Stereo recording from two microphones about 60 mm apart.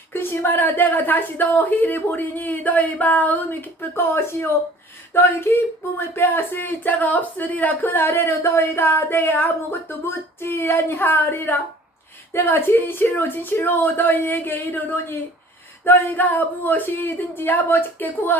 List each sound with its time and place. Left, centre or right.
0.1 s a woman's voice: left
3.9 s a woman's voice: left